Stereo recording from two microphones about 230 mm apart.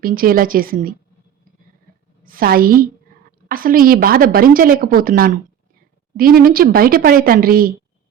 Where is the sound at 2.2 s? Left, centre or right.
Right.